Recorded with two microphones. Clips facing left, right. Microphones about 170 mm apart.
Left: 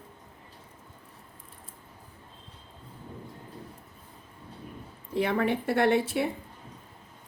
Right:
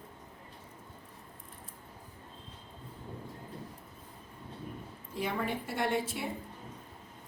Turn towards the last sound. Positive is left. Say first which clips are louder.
# left 8 dB
turn(degrees=70)  # may be behind; listen again after turning